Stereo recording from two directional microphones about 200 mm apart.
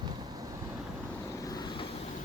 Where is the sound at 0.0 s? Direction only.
20° right (ahead or behind).